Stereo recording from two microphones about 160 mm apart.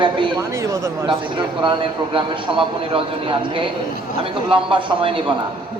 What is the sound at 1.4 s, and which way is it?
A man's voice, 30° right (ahead or behind).